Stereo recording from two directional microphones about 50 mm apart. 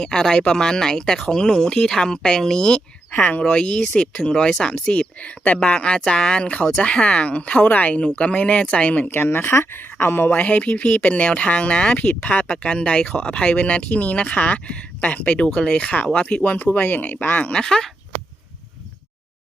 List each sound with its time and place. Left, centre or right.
0.0 s speech: centre
3.1 s speech: left
9.0 s speech: left
10.2 s speech: left
11.9 s speech: left
17.5 s speech: centre